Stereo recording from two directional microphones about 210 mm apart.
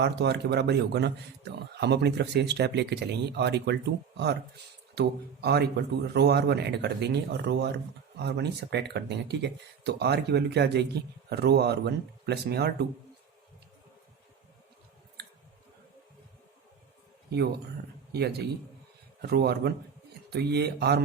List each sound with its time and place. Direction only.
0.0 s speech: 55° right (ahead or behind)
4.9 s speech: 50° right (ahead or behind)
18.1 s speech: 50° right (ahead or behind)